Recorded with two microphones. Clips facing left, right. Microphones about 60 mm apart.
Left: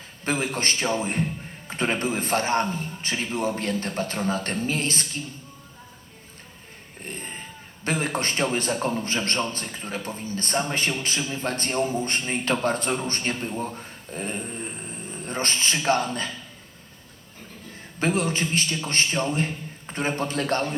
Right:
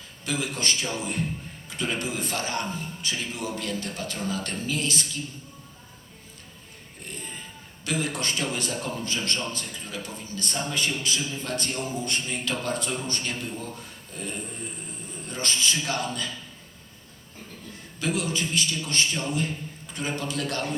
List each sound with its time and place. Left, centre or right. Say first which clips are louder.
0.3 s a man's voice: left 3 dB; left
7.0 s music: left 3 dB; left
7.9 s a man's voice: left 3 dB; left
18.0 s a man's voice: left 4 dB; left